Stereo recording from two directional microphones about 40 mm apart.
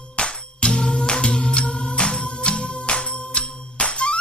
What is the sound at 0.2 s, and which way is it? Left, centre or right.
Music, left.